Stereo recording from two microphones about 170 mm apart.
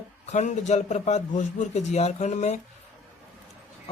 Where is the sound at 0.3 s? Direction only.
45° left (ahead or behind).